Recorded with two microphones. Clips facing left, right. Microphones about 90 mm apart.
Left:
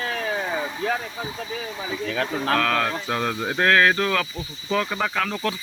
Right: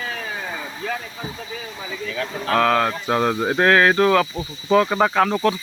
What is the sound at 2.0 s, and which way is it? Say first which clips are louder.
Speech: left 1 dB; 50° left (ahead or behind).